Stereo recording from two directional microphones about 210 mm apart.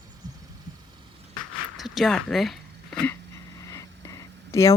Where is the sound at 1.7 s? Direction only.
Centre (ahead or behind).